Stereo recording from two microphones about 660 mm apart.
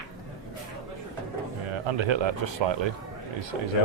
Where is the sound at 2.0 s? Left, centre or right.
Right.